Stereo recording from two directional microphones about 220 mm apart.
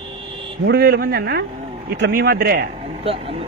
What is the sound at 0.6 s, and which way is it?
Speech, 45° right (ahead or behind).